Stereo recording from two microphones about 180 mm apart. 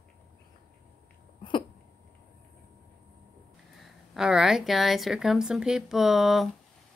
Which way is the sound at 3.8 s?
5° right (ahead or behind).